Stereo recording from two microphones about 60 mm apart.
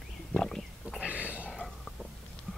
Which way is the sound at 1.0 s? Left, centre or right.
Right.